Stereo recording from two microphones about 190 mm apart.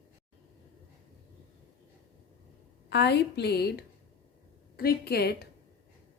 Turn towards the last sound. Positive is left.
turn(degrees=55)  # may be behind; listen again after turning